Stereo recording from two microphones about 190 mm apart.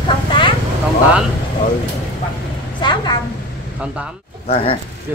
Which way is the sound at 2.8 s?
25° left (ahead or behind).